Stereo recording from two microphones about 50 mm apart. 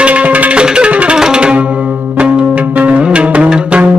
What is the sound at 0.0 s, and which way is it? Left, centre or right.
Music, right.